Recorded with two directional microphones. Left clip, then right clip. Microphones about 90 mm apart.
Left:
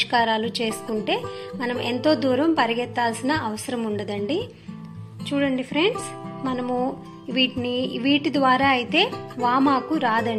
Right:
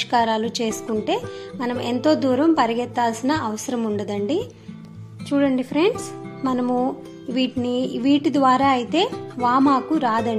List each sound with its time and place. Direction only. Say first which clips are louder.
0.0 s a woman's voice: right 1 dB; 25° right (ahead or behind)
5.3 s a woman's voice: right 3 dB; 35° right (ahead or behind)
6.4 s speech: right 4 dB; 60° right (ahead or behind)
7.3 s a woman's voice: even; 30° right (ahead or behind)